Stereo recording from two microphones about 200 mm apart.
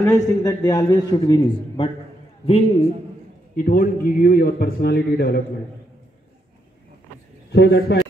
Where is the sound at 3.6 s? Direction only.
45° left (ahead or behind).